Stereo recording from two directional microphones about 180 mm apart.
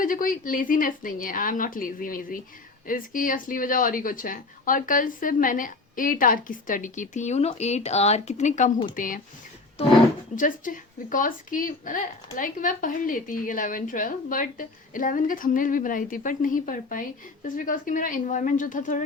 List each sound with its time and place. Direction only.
0.0 s speech: 50° left (ahead or behind)
10.3 s speech: 45° left (ahead or behind)